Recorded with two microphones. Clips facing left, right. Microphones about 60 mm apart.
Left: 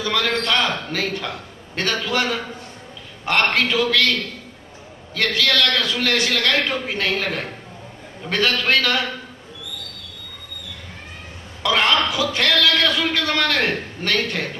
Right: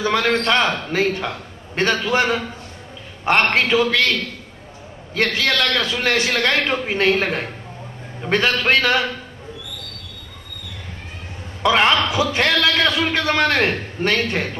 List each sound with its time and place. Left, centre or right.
0.0 s a man's voice: right
5.1 s a man's voice: right
11.6 s a man's voice: right